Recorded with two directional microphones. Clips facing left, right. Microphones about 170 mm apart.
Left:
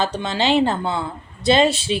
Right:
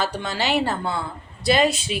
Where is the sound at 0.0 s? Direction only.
20° left (ahead or behind).